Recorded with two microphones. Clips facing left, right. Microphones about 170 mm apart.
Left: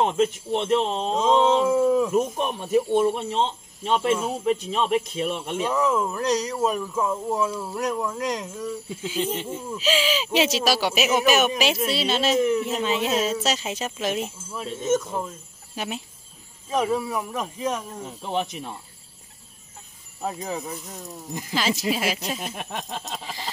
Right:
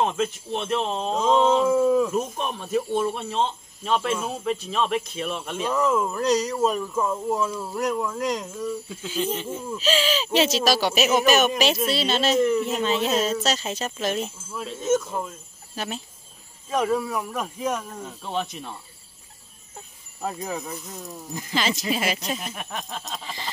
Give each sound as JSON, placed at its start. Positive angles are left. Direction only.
{"t": 0.0, "sound": "speech", "side_deg": 20}
{"t": 5.9, "sound": "speech", "side_deg": -5}
{"t": 7.3, "sound": "speech", "side_deg": 10}
{"t": 9.7, "sound": "speech", "side_deg": 10}
{"t": 14.8, "sound": "speech", "side_deg": -5}
{"t": 15.7, "sound": "speech", "side_deg": 10}
{"t": 17.7, "sound": "speech", "side_deg": 15}
{"t": 20.2, "sound": "speech", "side_deg": 5}
{"t": 22.6, "sound": "speech", "side_deg": 25}